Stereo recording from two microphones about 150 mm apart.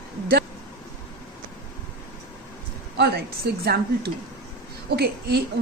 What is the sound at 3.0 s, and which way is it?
A woman's voice, 90° right.